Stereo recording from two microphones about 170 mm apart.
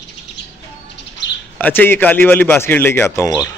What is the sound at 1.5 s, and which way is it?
A man's voice, 10° left (ahead or behind).